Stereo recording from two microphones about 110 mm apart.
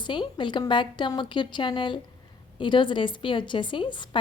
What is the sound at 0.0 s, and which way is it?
A woman's voice, 45° left (ahead or behind).